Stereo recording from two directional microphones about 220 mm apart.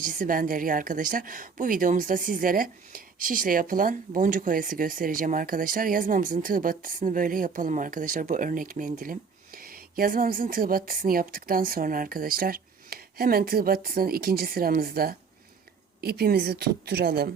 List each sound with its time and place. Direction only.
0.0 s a woman's voice: 40° right (ahead or behind)